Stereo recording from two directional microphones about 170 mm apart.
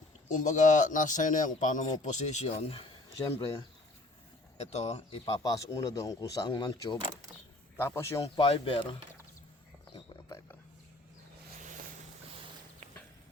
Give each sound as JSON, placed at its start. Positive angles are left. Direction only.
{"t": 0.3, "sound": "a man's voice", "side_deg": 45}
{"t": 4.5, "sound": "speech", "side_deg": 40}
{"t": 5.2, "sound": "speech", "side_deg": 20}
{"t": 8.4, "sound": "speech", "side_deg": 35}
{"t": 10.2, "sound": "a sound", "side_deg": 20}